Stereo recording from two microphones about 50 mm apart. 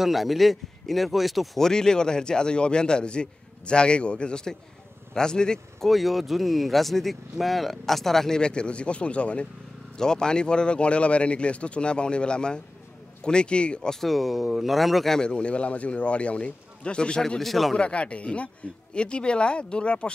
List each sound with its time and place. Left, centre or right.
0.0 s speech: centre
1.6 s a man's voice: centre
5.9 s speech: centre
8.4 s speech: centre
13.9 s speech: centre
15.1 s speech: centre
17.4 s speech: centre
17.7 s speech: left